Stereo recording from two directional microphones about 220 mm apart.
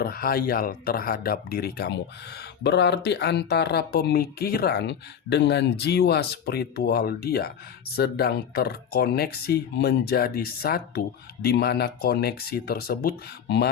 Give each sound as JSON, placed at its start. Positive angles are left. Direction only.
{"t": 0.0, "sound": "speech", "side_deg": 45}